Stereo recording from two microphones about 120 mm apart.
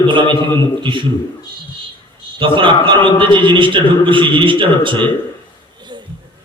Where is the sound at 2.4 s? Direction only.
45° right (ahead or behind).